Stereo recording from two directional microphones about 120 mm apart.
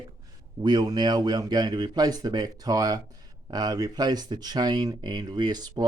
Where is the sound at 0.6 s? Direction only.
35° right (ahead or behind).